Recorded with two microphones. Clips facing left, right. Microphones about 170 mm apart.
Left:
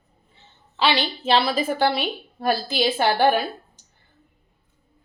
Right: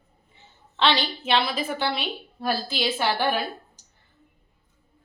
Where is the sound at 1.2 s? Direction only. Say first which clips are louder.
Left 5 dB; 35° left (ahead or behind).